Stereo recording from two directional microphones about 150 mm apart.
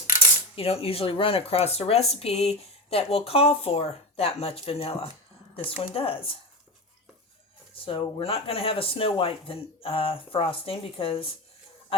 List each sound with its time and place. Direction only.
0.5 s speech: 40° left (ahead or behind)
7.9 s speech: 40° left (ahead or behind)